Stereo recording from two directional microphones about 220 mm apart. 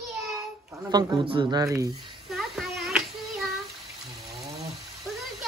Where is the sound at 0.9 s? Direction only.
20° right (ahead or behind).